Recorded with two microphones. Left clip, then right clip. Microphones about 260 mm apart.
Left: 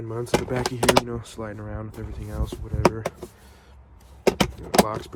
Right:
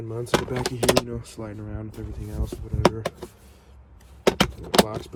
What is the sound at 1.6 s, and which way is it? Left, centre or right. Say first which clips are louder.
Speech: left 2 dB; left.